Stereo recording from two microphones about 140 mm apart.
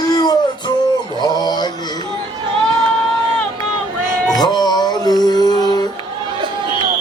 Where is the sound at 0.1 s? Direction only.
30° left (ahead or behind).